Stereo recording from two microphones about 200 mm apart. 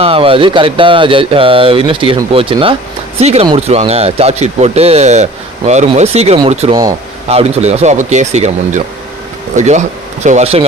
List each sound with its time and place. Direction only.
0.0 s speech: 30° right (ahead or behind)